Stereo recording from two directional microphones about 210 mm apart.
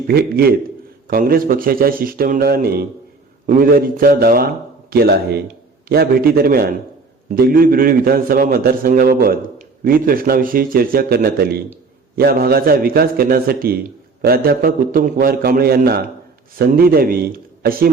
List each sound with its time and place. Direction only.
0.1 s a man's voice: 45° right (ahead or behind)